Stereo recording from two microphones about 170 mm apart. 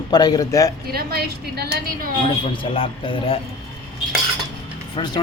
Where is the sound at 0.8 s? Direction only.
65° right (ahead or behind).